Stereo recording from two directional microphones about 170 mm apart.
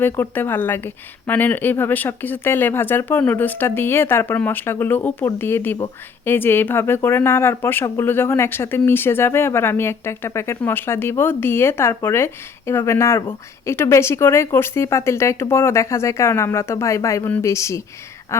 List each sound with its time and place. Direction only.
0.0 s speech: 10° left (ahead or behind)